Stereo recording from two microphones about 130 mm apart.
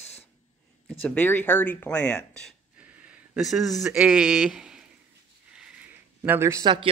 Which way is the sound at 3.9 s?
10° right (ahead or behind).